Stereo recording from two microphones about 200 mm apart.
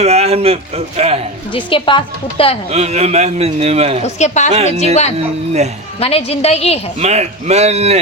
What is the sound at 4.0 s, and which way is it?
Speech, 35° left (ahead or behind).